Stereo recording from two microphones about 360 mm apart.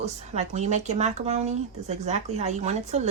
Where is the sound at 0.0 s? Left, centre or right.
Centre.